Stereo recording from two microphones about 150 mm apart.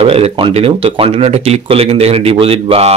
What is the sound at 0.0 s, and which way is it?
Speech, 40° right (ahead or behind).